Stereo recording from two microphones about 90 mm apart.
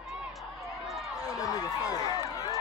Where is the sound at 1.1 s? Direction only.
40° left (ahead or behind).